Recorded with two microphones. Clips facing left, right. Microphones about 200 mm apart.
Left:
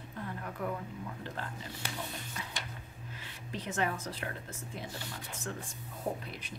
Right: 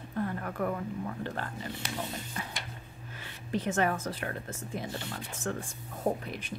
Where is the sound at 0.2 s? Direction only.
55° right (ahead or behind).